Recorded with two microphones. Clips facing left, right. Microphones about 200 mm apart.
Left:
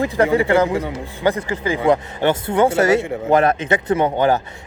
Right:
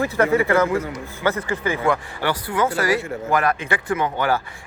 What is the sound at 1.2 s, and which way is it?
Speech, 15° left (ahead or behind).